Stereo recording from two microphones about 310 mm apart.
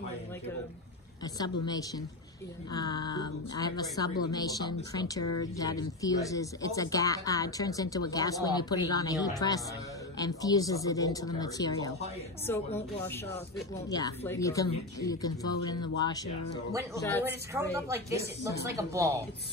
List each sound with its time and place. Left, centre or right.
1.2 s speech: centre
5.2 s speech: left
5.6 s speech: centre
17.2 s a woman's voice: centre